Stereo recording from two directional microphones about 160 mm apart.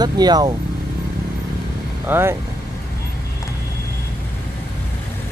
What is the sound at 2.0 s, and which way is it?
Speech, 15° right (ahead or behind).